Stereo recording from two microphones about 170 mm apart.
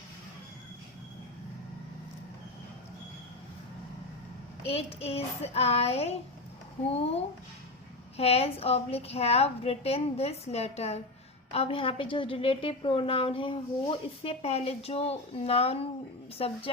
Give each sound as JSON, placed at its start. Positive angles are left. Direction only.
{"t": 4.7, "sound": "a woman's voice", "side_deg": 35}